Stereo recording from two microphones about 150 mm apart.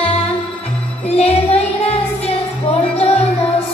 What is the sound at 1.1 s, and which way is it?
Child singing, 45° left (ahead or behind).